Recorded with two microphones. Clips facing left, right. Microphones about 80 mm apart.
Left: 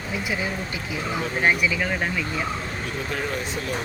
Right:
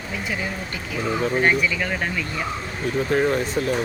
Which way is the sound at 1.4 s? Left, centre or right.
Centre.